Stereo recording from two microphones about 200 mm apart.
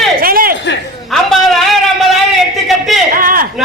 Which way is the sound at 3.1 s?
45° right (ahead or behind).